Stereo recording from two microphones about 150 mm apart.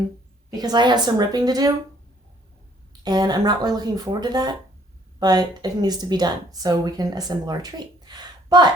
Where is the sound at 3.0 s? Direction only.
25° right (ahead or behind).